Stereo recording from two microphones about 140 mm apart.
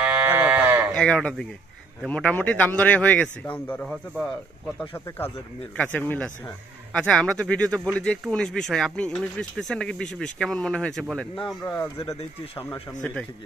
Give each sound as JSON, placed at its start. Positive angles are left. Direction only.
{"t": 0.0, "sound": "sheep", "side_deg": -15}
{"t": 0.9, "sound": "a man's voice", "side_deg": 5}
{"t": 11.6, "sound": "a man's voice", "side_deg": 15}